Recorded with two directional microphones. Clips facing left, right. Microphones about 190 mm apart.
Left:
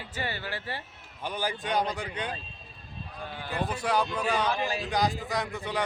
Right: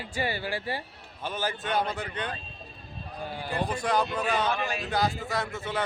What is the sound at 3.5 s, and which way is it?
A man's voice, centre (ahead or behind).